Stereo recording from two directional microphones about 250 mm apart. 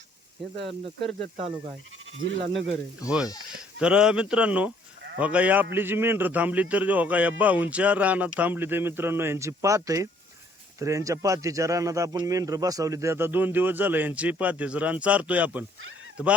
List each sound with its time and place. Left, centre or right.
1.4 s speech: right
2.1 s speech: right
3.8 s speech: centre